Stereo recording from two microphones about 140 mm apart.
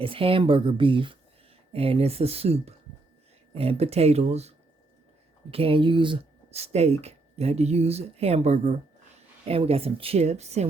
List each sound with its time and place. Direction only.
0.0 s speech: 40° right (ahead or behind)